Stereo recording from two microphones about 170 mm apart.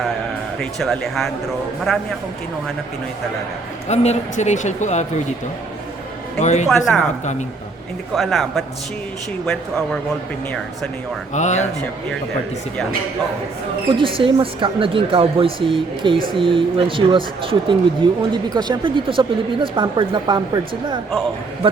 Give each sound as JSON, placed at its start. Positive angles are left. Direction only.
{"t": 0.6, "sound": "speech", "side_deg": 0}
{"t": 3.8, "sound": "speech", "side_deg": 40}
{"t": 6.4, "sound": "speech", "side_deg": 45}
{"t": 6.7, "sound": "speech", "side_deg": 0}
{"t": 8.1, "sound": "speech", "side_deg": 0}
{"t": 11.3, "sound": "speech", "side_deg": 45}
{"t": 13.9, "sound": "speech", "side_deg": -30}